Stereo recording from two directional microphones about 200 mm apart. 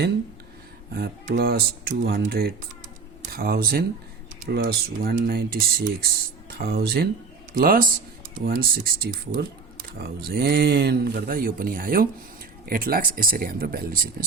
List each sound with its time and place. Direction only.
0.9 s speech: 50° right (ahead or behind)